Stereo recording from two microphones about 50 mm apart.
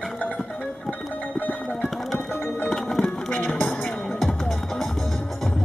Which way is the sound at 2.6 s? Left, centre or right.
Centre.